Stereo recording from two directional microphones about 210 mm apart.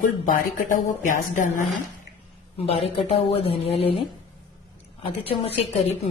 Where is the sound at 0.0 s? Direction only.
40° left (ahead or behind).